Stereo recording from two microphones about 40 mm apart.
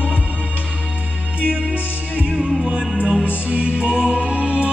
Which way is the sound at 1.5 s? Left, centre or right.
Right.